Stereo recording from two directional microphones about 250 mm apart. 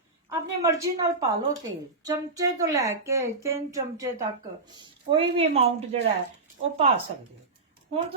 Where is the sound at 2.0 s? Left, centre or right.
Centre.